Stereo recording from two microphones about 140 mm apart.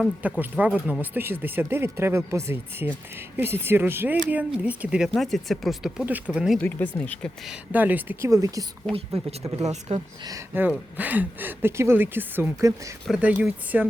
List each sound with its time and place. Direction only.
0.2 s speech: 10° right (ahead or behind)
6.1 s speech: 10° right (ahead or behind)
6.6 s speech: 10° left (ahead or behind)
7.5 s speech: 10° right (ahead or behind)
8.9 s speech: 45° right (ahead or behind)
10.5 s speech: 15° right (ahead or behind)
13.1 s speech: 5° right (ahead or behind)